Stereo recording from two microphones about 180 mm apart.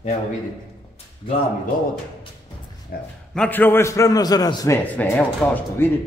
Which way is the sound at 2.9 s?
60° left (ahead or behind).